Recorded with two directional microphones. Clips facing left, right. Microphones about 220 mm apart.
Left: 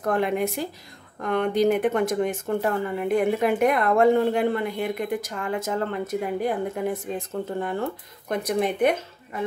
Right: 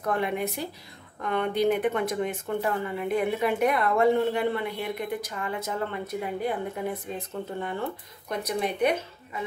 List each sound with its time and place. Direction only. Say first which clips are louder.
0.0 s speech: left 4 dB; 50° left (ahead or behind)